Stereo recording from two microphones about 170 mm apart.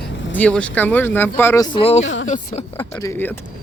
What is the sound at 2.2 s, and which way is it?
Speech, 45° left (ahead or behind).